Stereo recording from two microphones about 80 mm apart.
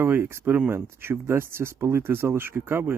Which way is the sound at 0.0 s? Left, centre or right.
Right.